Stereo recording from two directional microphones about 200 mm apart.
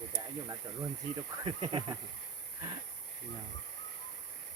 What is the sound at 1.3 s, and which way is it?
Speech, 20° right (ahead or behind).